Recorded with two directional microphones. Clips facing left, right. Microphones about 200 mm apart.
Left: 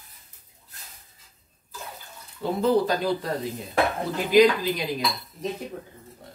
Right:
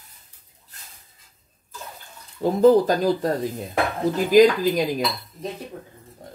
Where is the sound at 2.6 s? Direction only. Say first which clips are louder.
Right 7 dB; 45° right (ahead or behind).